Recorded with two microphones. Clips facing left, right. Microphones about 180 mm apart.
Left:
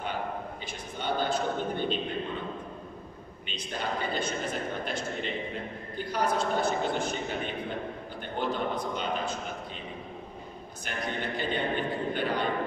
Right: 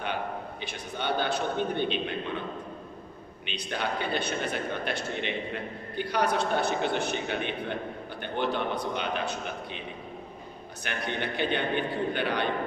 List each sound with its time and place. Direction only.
0.7 s a man's voice: 70° right (ahead or behind)
3.4 s a man's voice: 70° right (ahead or behind)
10.8 s a man's voice: 70° right (ahead or behind)